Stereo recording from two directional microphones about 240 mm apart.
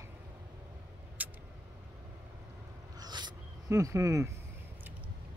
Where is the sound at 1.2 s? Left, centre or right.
Centre.